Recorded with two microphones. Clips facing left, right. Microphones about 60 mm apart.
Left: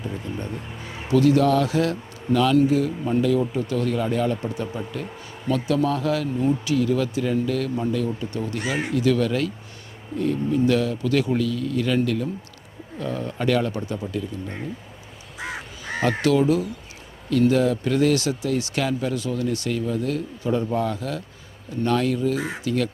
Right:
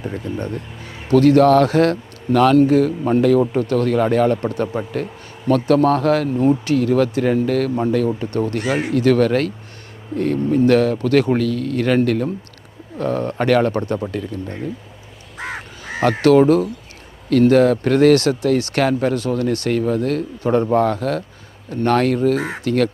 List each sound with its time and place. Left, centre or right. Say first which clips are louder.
0.0 s speech: right 5 dB; right
16.2 s speech: right 8 dB; right